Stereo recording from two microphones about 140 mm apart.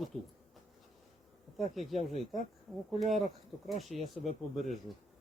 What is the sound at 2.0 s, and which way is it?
Speech, 55° left (ahead or behind).